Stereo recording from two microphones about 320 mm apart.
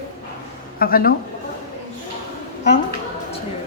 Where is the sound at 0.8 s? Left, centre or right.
Left.